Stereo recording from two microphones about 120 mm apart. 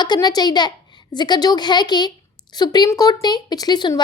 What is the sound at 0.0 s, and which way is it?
A woman's voice, 35° left (ahead or behind).